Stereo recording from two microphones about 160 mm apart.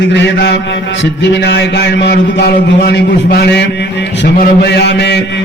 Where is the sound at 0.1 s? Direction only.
90° left.